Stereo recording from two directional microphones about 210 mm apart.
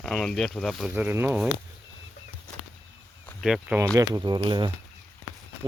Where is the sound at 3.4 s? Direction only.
5° right (ahead or behind).